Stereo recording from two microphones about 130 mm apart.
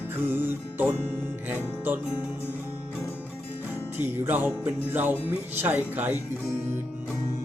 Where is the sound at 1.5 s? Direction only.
15° right (ahead or behind).